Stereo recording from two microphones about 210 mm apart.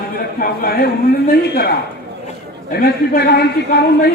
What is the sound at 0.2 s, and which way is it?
Speech, 45° left (ahead or behind).